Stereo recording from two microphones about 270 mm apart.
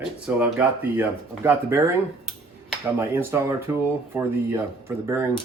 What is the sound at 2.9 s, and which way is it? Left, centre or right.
Speech, centre.